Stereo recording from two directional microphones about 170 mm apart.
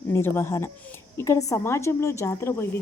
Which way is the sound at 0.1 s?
15° left (ahead or behind).